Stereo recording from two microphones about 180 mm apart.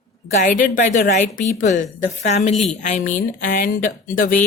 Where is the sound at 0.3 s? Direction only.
45° left (ahead or behind).